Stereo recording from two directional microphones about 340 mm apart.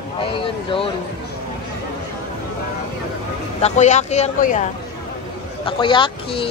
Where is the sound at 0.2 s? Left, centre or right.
Centre.